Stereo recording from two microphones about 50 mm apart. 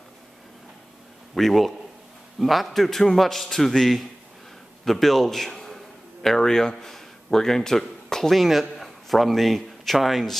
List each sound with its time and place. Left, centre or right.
1.3 s a man's voice: centre